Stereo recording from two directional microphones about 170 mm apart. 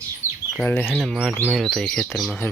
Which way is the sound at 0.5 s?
10° left (ahead or behind).